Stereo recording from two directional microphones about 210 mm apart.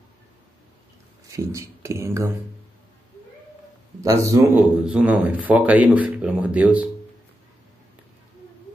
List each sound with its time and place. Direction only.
1.2 s speech: 15° right (ahead or behind)
4.0 s speech: 15° right (ahead or behind)
4.6 s speech: 5° right (ahead or behind)